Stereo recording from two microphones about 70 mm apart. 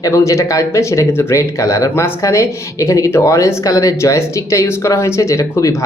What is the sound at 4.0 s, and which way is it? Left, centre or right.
Speech, left.